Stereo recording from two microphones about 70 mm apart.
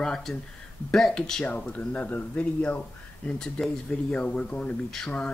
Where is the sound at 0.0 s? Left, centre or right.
Centre.